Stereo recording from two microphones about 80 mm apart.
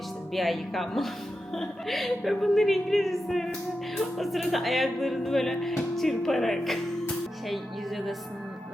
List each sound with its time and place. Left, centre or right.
0.3 s speech: centre
7.4 s music: centre